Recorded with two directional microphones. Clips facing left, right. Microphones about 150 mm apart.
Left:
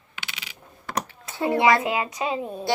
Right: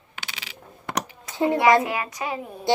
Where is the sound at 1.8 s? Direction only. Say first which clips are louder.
Left 1 dB; 20° left (ahead or behind).